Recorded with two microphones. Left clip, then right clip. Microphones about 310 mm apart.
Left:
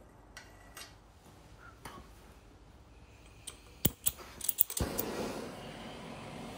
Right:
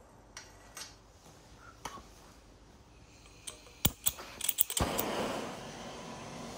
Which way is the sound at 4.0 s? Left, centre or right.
Centre.